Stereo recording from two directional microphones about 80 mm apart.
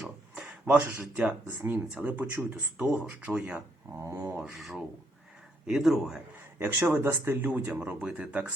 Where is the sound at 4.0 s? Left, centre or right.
Right.